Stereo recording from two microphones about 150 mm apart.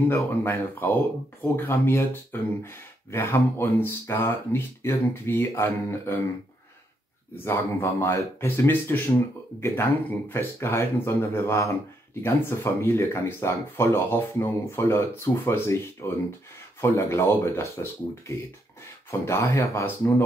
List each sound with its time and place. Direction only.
0.1 s speech: 15° left (ahead or behind)
7.4 s speech: 15° left (ahead or behind)